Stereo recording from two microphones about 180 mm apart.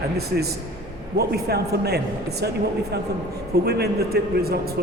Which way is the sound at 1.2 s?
60° right (ahead or behind).